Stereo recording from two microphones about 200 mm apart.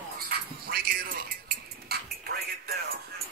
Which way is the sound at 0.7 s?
45° right (ahead or behind).